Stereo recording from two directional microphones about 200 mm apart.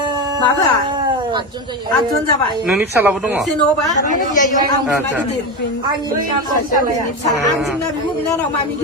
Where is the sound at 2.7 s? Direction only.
10° right (ahead or behind).